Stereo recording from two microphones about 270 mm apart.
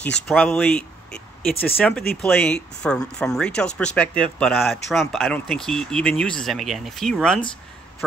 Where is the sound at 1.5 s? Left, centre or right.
Left.